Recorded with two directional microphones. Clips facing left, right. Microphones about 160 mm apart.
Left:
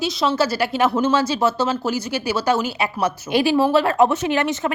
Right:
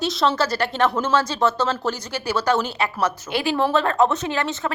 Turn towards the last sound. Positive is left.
turn(degrees=20)  # may be behind; listen again after turning